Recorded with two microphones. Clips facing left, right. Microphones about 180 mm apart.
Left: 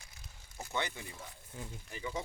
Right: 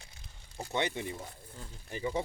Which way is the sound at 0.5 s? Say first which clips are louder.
Right 5 dB; 25° right (ahead or behind).